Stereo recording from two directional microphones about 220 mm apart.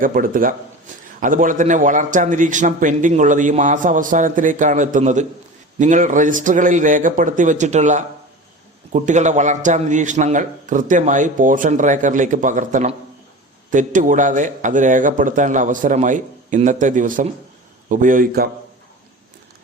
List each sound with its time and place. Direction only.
0.0 s a man's voice: 40° right (ahead or behind)